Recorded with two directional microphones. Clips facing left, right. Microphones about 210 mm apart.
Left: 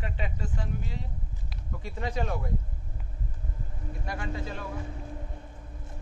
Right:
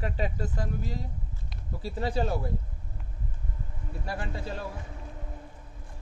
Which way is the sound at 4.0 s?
35° right (ahead or behind).